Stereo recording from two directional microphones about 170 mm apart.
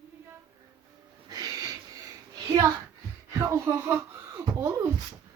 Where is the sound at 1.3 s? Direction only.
20° right (ahead or behind).